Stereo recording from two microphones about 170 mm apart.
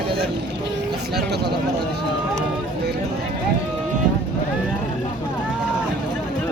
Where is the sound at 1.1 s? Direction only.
75° right (ahead or behind).